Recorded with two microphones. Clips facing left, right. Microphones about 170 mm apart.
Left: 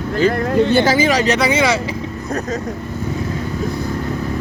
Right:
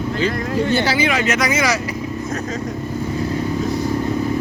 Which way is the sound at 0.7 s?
45° left (ahead or behind).